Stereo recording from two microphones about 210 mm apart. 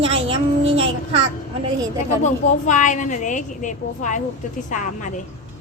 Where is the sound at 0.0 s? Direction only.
25° right (ahead or behind).